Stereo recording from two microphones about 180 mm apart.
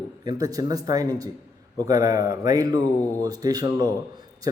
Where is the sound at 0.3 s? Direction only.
20° right (ahead or behind).